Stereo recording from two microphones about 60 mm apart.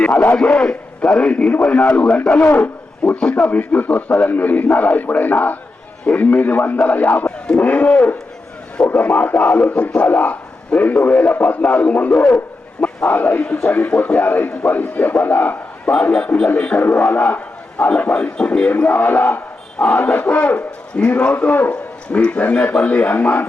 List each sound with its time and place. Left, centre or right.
0.3 s a man's voice: centre; by 7.3 s left
7.3 s a man's voice: centre; by 15.5 s left
15.9 s a man's voice: centre
16.8 s a man's voice: left
20.6 s a man's voice: centre
21.3 s a man's voice: left
21.7 s a man's voice: centre